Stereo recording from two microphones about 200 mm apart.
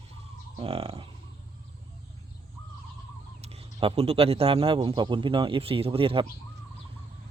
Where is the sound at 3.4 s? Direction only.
30° right (ahead or behind).